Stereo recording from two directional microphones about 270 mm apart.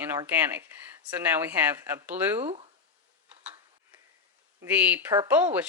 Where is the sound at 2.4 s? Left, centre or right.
Right.